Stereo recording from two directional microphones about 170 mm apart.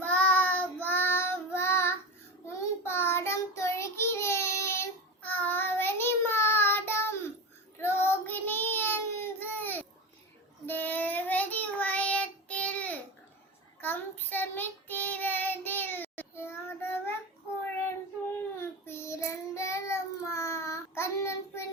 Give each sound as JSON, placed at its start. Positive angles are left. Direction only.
{"t": 0.0, "sound": "child singing", "side_deg": 10}
{"t": 18.6, "sound": "child singing", "side_deg": 15}